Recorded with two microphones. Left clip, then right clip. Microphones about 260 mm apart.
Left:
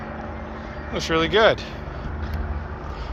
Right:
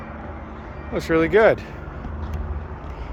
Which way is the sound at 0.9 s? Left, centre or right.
Right.